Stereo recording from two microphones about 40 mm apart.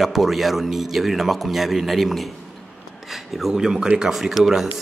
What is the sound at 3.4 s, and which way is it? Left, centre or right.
Speech, centre.